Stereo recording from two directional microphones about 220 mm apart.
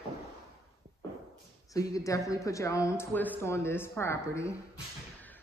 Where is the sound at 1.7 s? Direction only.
15° left (ahead or behind).